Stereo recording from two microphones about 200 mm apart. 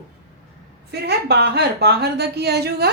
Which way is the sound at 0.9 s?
55° right (ahead or behind).